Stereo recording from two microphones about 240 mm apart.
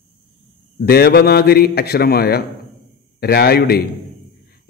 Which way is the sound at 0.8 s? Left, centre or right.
Left.